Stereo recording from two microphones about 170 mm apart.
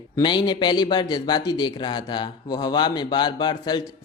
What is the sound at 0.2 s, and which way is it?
A man's voice, 25° left (ahead or behind).